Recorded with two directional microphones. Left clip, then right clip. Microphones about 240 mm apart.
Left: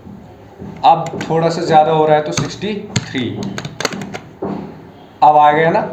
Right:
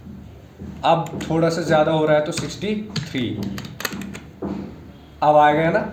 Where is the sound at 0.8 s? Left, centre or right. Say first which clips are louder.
Left 7 dB; right.